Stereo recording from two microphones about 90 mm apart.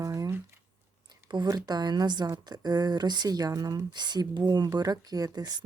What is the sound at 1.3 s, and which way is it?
Speech, 55° right (ahead or behind).